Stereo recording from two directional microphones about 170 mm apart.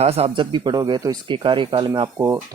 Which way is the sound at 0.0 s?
35° right (ahead or behind).